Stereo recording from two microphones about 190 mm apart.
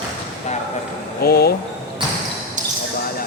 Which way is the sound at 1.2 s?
55° left (ahead or behind).